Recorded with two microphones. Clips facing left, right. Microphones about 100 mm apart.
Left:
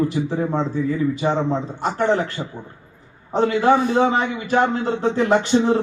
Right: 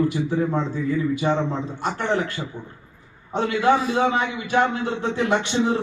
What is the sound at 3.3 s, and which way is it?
Speech, 35° left (ahead or behind).